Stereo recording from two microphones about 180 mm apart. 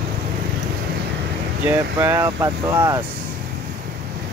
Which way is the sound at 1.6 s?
15° right (ahead or behind).